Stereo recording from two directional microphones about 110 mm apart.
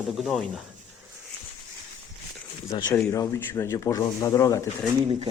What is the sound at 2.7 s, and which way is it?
Speech, 40° left (ahead or behind).